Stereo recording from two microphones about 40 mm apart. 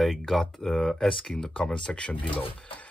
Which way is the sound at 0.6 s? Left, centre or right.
Centre.